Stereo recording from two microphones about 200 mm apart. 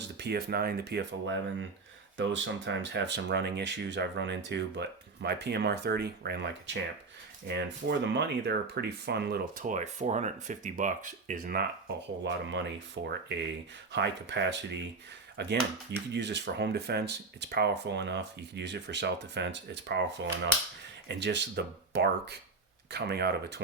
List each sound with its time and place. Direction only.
0.0 s speech: 55° right (ahead or behind)
12.2 s speech: 60° right (ahead or behind)